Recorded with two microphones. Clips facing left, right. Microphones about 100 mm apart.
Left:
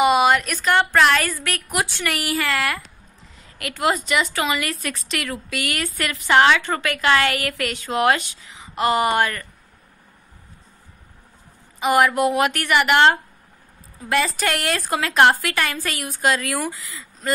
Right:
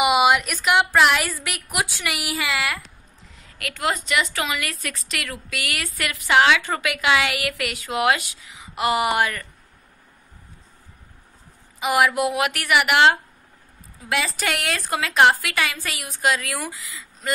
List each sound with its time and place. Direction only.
0.0 s a woman's voice: 10° right (ahead or behind)
11.8 s a woman's voice: 5° right (ahead or behind)